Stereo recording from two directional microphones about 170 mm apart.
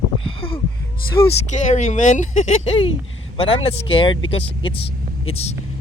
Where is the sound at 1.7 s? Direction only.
45° left (ahead or behind).